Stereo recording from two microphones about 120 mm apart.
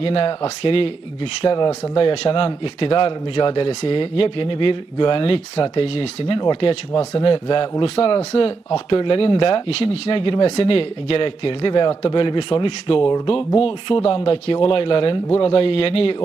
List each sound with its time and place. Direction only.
0.0 s speech: 55° left (ahead or behind)